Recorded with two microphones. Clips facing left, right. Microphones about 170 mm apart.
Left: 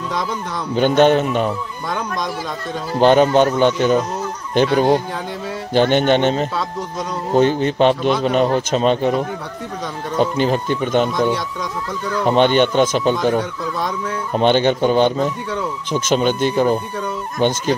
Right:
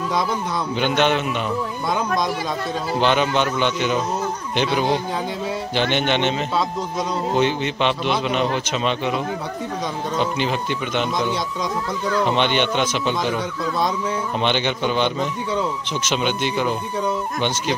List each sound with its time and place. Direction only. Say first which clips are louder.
0.7 s speech: left 7 dB; 45° left (ahead or behind)
3.0 s speech: left 8 dB; 40° left (ahead or behind)
5.8 s a man's voice: left 7 dB; 45° left (ahead or behind)
12.3 s speech: left 11 dB; 45° left (ahead or behind)
14.3 s speech: left 10 dB; 40° left (ahead or behind)